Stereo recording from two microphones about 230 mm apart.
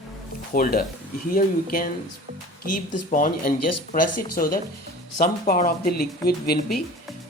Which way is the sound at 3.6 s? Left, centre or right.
Left.